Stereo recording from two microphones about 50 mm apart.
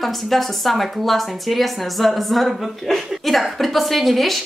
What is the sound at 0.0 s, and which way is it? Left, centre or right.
Speech, centre.